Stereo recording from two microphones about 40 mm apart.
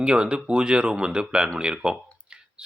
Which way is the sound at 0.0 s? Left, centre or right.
Right.